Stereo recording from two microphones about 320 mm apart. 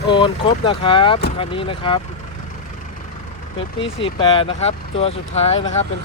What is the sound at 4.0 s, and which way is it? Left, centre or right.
Speech, centre.